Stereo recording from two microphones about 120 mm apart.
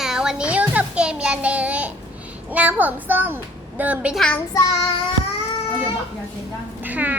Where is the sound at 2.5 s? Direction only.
15° right (ahead or behind).